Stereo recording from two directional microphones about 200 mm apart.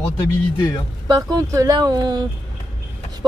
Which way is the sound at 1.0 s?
15° right (ahead or behind).